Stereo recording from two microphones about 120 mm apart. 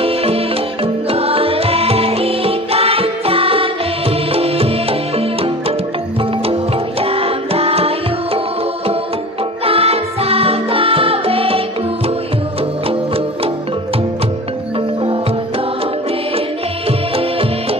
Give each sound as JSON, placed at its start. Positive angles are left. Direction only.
{"t": 0.0, "sound": "music", "side_deg": -55}
{"t": 9.7, "sound": "music", "side_deg": -55}